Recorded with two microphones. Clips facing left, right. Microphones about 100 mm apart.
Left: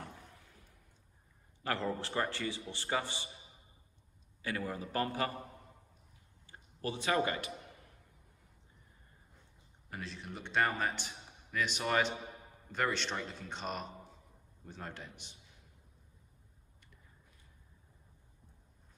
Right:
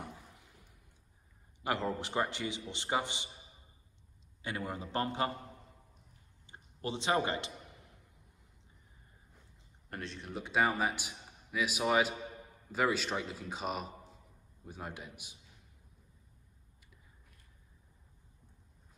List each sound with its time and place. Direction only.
1.6 s a man's voice: 15° right (ahead or behind)
4.4 s a man's voice: 25° right (ahead or behind)
6.4 s a man's voice: 25° right (ahead or behind)
9.8 s a man's voice: centre (ahead or behind)